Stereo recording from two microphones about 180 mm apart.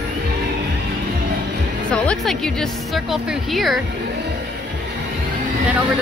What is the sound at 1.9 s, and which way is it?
A woman's voice, 5° left (ahead or behind).